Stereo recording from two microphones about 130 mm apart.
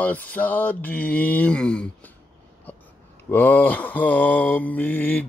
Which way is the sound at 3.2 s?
15° left (ahead or behind).